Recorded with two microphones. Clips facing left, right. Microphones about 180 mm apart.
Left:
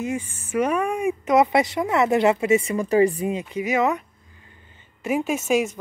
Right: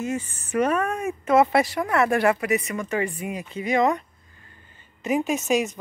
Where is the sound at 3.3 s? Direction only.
15° left (ahead or behind).